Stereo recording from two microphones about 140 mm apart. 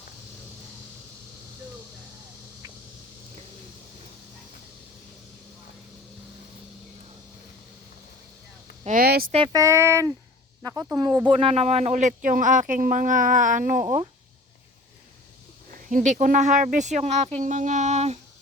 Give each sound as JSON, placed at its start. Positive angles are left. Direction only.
{"t": 8.8, "sound": "a sound", "side_deg": -80}
{"t": 9.5, "sound": "speech", "side_deg": -20}
{"t": 11.3, "sound": "speech", "side_deg": -40}
{"t": 15.9, "sound": "speech", "side_deg": -65}